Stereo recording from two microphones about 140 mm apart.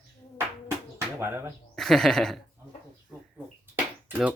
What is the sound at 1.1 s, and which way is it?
Speech, 20° right (ahead or behind).